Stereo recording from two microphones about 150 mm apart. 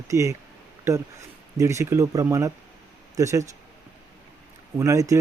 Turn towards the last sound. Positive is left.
turn(degrees=-20)  # may be behind; listen again after turning